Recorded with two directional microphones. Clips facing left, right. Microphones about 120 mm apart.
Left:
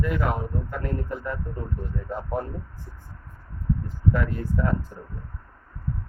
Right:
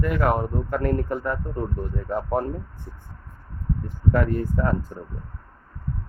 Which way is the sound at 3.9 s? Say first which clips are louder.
Right 5 dB; 50° right (ahead or behind).